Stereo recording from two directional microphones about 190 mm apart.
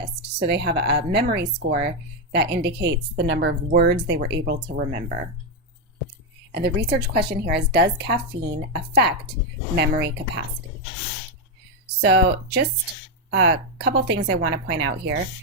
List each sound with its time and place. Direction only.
0.2 s speech: 60° right (ahead or behind)
6.5 s speech: 60° right (ahead or behind)
11.9 s speech: 60° right (ahead or behind)